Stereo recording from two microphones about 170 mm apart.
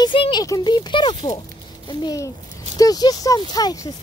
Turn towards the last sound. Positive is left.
turn(degrees=25)  # may be behind; listen again after turning